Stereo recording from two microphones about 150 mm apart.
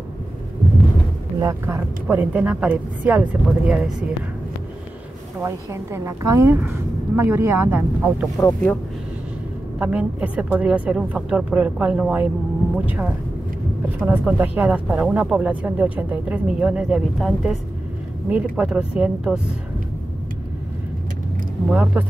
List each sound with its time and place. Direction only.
1.4 s speech: 20° right (ahead or behind)
5.4 s speech: 15° right (ahead or behind)
8.4 s speech: 15° left (ahead or behind)
9.8 s speech: 10° right (ahead or behind)
21.6 s speech: 10° right (ahead or behind)